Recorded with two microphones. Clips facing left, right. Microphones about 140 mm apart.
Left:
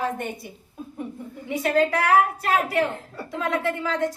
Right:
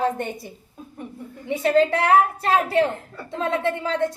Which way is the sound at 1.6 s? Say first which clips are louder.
Right 3 dB; 30° right (ahead or behind).